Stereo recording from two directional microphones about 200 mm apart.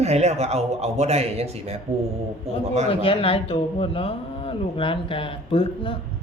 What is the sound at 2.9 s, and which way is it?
A man's voice, 25° left (ahead or behind).